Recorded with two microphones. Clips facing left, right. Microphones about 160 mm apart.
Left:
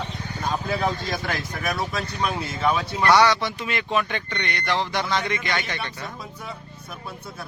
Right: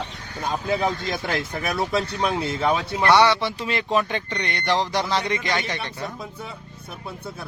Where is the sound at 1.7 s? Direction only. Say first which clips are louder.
Right 8 dB; 30° right (ahead or behind).